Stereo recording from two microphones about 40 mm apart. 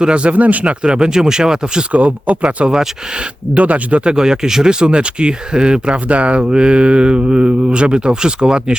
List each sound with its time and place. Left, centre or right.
0.0 s speech: right
0.3 s speech: right
0.9 s speech: centre
1.9 s speech: right
3.5 s speech: right
4.0 s speech: centre
6.1 s speech: right
6.5 s speech: right